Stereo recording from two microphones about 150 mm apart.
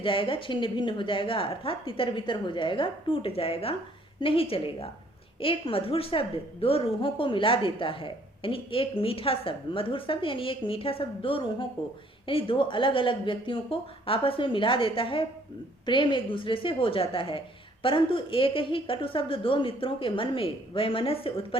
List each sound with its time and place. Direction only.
0.0 s a woman's voice: 35° left (ahead or behind)